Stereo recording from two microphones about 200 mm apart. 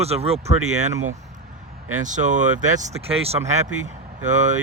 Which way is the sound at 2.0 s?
40° right (ahead or behind).